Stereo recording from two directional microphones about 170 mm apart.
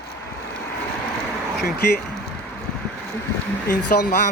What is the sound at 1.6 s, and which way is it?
Speech, 65° left (ahead or behind).